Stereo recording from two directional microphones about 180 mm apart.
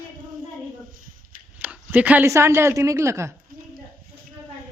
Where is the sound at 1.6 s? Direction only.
10° right (ahead or behind).